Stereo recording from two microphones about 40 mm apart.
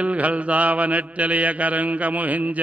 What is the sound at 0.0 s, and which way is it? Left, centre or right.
Mantra, right.